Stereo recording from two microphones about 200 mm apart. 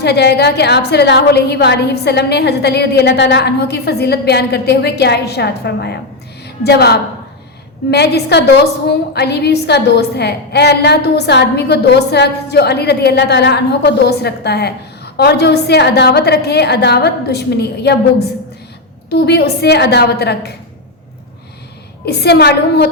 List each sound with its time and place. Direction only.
0.0 s a woman's voice: 55° left (ahead or behind)
19.2 s a woman's voice: 55° left (ahead or behind)
22.0 s a woman's voice: 55° left (ahead or behind)